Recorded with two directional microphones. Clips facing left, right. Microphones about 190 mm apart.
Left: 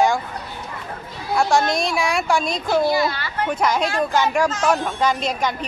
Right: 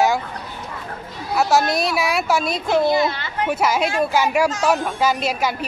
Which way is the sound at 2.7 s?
20° right (ahead or behind).